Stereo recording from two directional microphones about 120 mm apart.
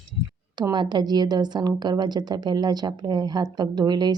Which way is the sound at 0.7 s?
40° right (ahead or behind).